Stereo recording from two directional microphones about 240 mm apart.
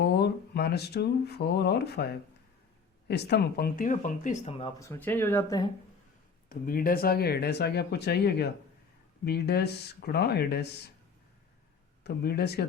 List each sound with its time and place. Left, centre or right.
0.0 s speech: left
4.8 s speech: centre
6.5 s speech: left
12.0 s speech: left